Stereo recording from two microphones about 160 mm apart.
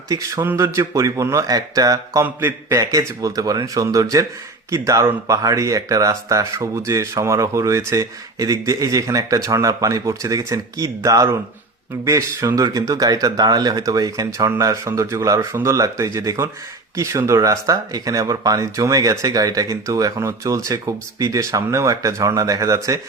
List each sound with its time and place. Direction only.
0.1 s a man's voice: 20° right (ahead or behind)